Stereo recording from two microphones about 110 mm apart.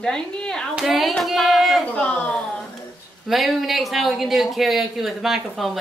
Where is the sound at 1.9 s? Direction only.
10° left (ahead or behind).